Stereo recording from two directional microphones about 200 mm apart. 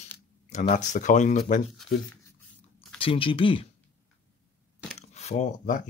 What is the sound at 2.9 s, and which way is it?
Speech, 25° left (ahead or behind).